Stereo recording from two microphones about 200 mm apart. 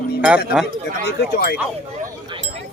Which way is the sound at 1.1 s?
50° left (ahead or behind).